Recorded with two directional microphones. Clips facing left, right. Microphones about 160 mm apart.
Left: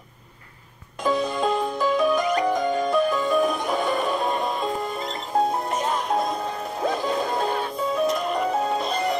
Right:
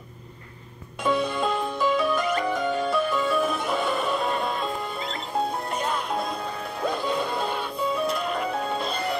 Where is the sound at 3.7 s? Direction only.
40° left (ahead or behind).